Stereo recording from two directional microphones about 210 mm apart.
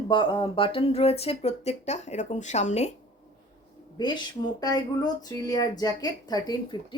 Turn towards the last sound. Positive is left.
turn(degrees=20)  # may be behind; listen again after turning